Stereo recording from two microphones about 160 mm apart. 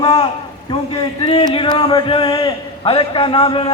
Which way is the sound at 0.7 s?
35° left (ahead or behind).